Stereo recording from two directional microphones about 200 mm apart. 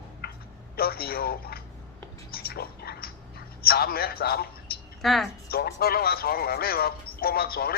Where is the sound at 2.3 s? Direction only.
50° left (ahead or behind).